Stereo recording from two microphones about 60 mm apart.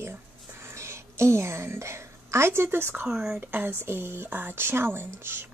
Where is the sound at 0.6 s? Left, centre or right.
Right.